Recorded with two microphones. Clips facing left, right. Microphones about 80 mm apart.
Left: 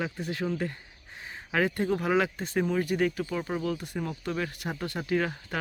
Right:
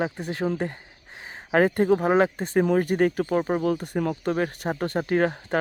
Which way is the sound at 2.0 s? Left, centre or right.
Right.